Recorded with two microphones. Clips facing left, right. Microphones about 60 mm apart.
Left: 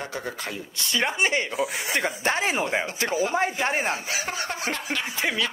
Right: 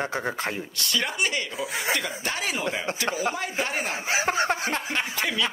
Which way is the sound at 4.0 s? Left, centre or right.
Right.